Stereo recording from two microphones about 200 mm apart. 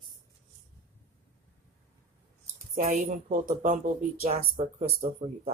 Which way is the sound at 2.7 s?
40° right (ahead or behind).